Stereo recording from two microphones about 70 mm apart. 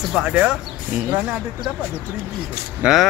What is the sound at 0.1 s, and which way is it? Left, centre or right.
Speech, centre.